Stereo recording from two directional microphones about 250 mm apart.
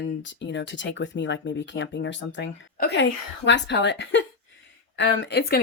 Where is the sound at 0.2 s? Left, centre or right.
Left.